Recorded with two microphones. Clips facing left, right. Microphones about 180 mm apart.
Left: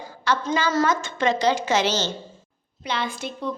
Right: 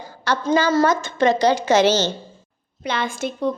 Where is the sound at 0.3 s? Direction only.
40° right (ahead or behind).